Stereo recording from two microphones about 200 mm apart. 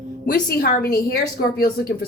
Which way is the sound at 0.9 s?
55° left (ahead or behind).